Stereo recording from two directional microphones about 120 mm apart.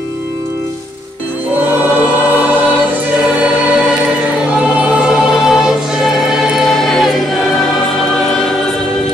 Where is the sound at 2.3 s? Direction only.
15° right (ahead or behind).